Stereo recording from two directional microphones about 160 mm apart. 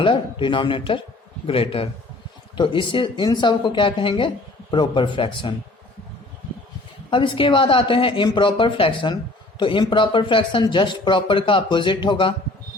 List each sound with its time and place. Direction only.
0.0 s speech: 30° left (ahead or behind)
7.1 s speech: 30° left (ahead or behind)